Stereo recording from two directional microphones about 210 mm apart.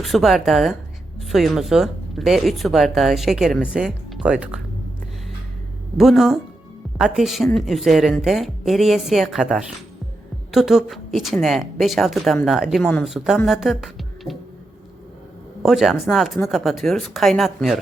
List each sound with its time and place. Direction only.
0.0 s speech: centre (ahead or behind)
6.0 s speech: centre (ahead or behind)
15.6 s speech: centre (ahead or behind)